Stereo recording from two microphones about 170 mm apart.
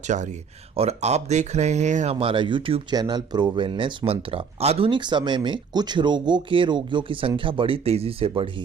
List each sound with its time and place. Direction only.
0.1 s speech: 45° right (ahead or behind)
2.1 s speech: 30° right (ahead or behind)